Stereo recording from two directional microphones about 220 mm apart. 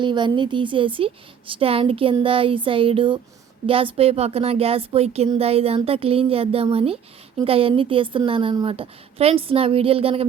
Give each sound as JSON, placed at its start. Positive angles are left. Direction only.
{"t": 0.0, "sound": "speech", "side_deg": -20}